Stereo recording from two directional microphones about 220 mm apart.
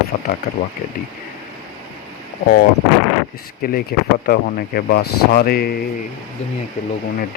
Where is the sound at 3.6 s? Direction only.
40° left (ahead or behind).